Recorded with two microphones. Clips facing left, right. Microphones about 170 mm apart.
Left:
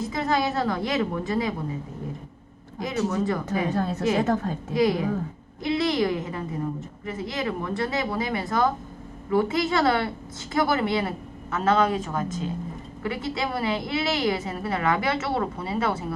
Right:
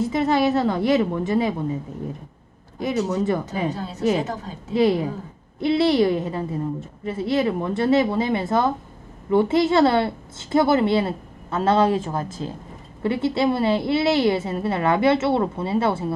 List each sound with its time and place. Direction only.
0.1 s a woman's voice: 25° right (ahead or behind)
2.8 s a woman's voice: 20° right (ahead or behind)
3.7 s a woman's voice: 55° left (ahead or behind)
4.7 s a woman's voice: 30° right (ahead or behind)